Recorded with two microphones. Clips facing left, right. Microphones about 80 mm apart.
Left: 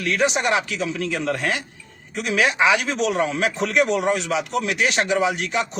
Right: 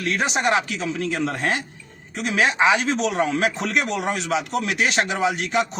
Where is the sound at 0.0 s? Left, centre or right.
Right.